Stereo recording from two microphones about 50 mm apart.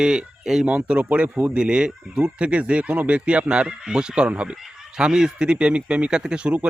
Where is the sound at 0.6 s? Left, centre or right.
Right.